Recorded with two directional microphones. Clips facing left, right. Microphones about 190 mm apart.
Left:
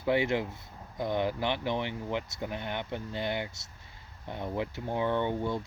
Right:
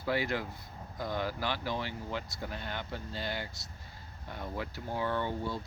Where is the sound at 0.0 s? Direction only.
20° left (ahead or behind).